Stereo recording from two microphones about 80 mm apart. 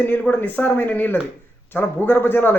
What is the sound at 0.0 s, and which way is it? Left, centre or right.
A man's voice, left.